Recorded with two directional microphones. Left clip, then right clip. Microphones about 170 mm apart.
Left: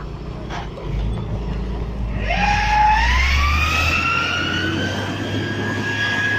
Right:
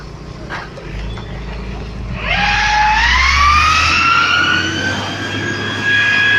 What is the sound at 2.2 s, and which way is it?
Emergency vehicle, 60° left (ahead or behind).